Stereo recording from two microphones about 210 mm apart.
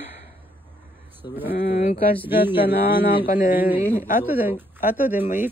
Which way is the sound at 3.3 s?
40° left (ahead or behind).